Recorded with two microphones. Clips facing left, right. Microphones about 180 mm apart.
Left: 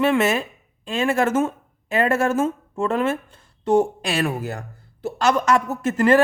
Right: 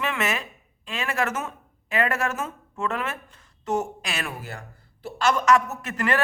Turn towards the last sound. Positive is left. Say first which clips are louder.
# left 9 dB
turn(degrees=30)  # may be behind; listen again after turning